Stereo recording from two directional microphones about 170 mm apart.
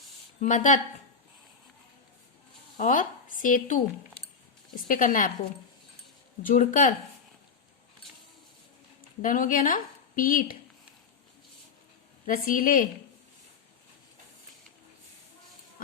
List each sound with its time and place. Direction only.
0.3 s speech: 50° left (ahead or behind)
2.7 s a woman's voice: 50° left (ahead or behind)
6.4 s speech: 50° left (ahead or behind)
9.2 s speech: 55° left (ahead or behind)
12.2 s a woman's voice: 55° left (ahead or behind)